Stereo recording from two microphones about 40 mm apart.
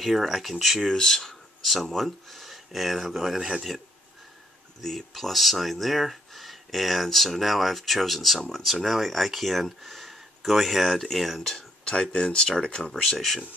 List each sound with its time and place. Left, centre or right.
0.0 s speech: centre
0.9 s speech: centre
4.8 s speech: centre
11.8 s speech: left